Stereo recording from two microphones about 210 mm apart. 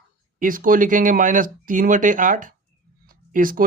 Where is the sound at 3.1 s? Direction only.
40° right (ahead or behind).